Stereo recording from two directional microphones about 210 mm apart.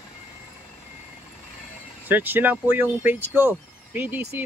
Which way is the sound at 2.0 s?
10° right (ahead or behind).